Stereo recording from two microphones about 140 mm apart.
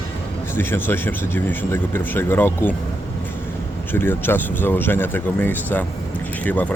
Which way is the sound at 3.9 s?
15° left (ahead or behind).